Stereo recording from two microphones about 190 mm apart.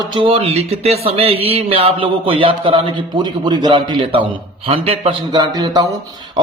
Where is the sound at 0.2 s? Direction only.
30° right (ahead or behind).